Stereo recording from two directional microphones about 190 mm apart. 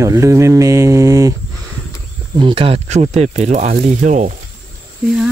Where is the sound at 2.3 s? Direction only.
25° right (ahead or behind).